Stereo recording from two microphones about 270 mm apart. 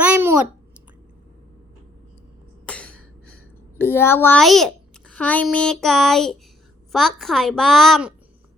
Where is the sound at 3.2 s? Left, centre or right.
Right.